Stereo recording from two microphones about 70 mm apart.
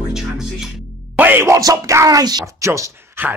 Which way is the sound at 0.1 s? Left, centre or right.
Centre.